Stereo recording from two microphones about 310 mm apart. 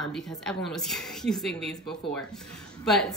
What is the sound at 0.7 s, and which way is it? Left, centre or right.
A woman's voice, centre.